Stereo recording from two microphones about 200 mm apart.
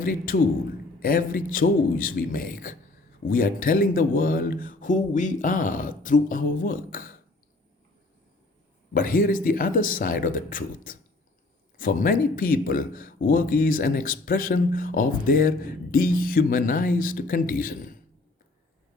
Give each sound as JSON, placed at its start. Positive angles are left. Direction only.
{"t": 0.0, "sound": "speech", "side_deg": 45}
{"t": 8.9, "sound": "speech", "side_deg": 45}